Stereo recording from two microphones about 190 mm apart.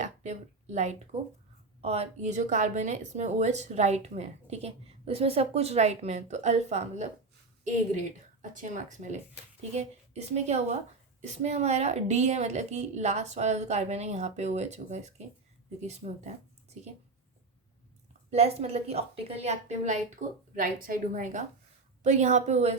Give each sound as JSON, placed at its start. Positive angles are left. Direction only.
{"t": 0.0, "sound": "a sound", "side_deg": -40}
{"t": 1.8, "sound": "a woman's voice", "side_deg": -35}
{"t": 18.3, "sound": "a woman's voice", "side_deg": -30}